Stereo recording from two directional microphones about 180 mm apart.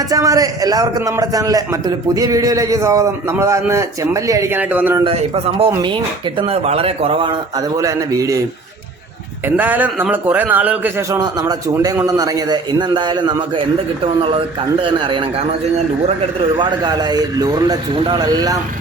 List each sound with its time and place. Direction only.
0.1 s a man's voice: 20° right (ahead or behind)
4.9 s speech: 30° right (ahead or behind)
7.8 s a man's voice: 20° right (ahead or behind)
9.6 s a man's voice: 10° right (ahead or behind); by 15.4 s 30° right (ahead or behind)
16.6 s a man's voice: 25° right (ahead or behind)